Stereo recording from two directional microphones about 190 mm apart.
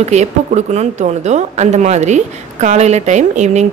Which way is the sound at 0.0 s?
35° right (ahead or behind).